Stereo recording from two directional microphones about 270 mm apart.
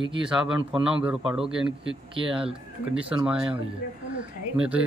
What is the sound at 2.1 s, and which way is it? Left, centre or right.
Speech, centre.